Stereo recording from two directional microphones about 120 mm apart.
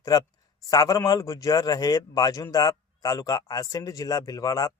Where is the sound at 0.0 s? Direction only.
30° left (ahead or behind).